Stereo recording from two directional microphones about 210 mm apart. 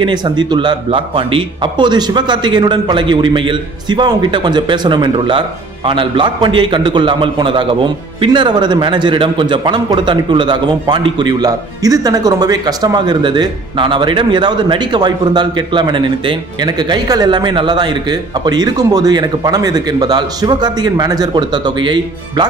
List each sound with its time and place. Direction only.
0.0 s a man's voice: 20° right (ahead or behind)